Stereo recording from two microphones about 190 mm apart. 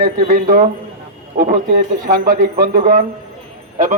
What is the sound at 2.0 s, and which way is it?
Speech, 45° right (ahead or behind).